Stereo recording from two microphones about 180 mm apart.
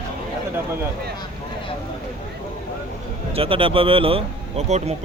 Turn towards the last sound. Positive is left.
turn(degrees=-35)  # may be behind; listen again after turning